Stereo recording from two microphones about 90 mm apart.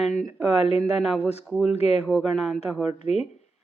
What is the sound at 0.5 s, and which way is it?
Speech, 90° left.